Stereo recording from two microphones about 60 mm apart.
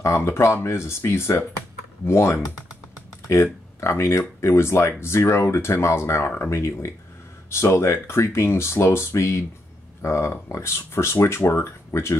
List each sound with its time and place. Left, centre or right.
0.0 s speech: left
6.2 s speech: left
6.5 s speech: left